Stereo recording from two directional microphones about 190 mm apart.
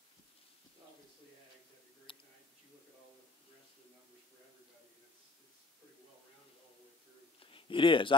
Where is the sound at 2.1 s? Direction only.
30° left (ahead or behind).